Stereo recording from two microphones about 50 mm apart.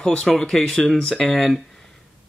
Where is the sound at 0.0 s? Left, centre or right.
Centre.